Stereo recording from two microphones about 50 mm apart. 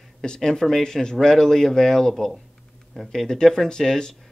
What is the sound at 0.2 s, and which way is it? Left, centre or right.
Speech, centre.